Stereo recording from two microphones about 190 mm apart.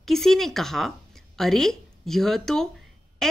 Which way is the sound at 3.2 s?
Centre (ahead or behind).